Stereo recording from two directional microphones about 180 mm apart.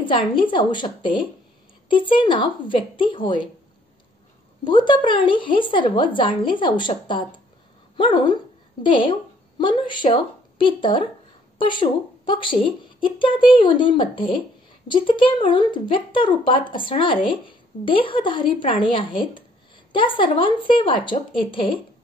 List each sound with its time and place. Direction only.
0.0 s speech: 30° left (ahead or behind)
4.6 s a woman's voice: 25° left (ahead or behind)